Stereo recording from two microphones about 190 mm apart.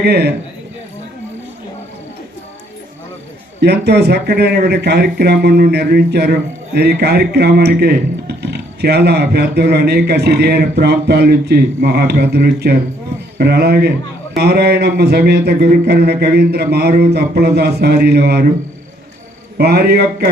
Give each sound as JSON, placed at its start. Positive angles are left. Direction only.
{"t": 0.0, "sound": "speech", "side_deg": -60}
{"t": 3.6, "sound": "speech", "side_deg": -60}
{"t": 19.5, "sound": "speech", "side_deg": -55}